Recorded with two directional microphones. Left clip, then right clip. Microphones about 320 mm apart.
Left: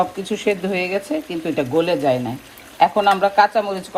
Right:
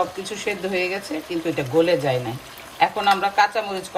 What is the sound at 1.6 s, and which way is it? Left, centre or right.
Speech, centre.